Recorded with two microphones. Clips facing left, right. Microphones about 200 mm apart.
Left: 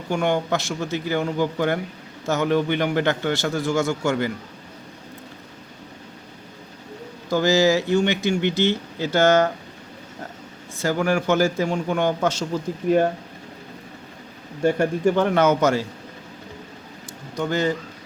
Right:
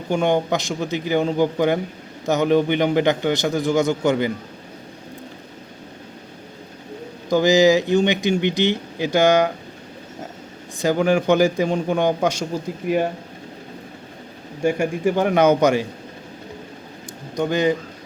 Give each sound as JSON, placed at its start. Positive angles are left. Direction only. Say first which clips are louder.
{"t": 0.1, "sound": "speech", "louder": "right 3 dB", "side_deg": -20}
{"t": 7.3, "sound": "speech", "louder": "right 4 dB", "side_deg": -15}
{"t": 10.8, "sound": "speech", "louder": "right 4 dB", "side_deg": -20}
{"t": 14.6, "sound": "speech", "louder": "even", "side_deg": -10}
{"t": 17.3, "sound": "speech", "louder": "right 3 dB", "side_deg": -15}